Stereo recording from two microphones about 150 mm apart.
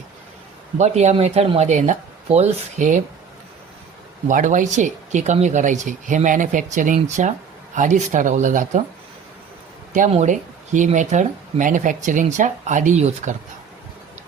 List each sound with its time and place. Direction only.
0.8 s speech: 50° right (ahead or behind)
4.3 s speech: 60° right (ahead or behind)
10.1 s speech: 50° right (ahead or behind)